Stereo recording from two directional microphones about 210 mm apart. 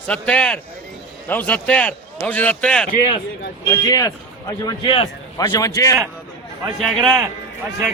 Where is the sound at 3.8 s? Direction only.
15° left (ahead or behind).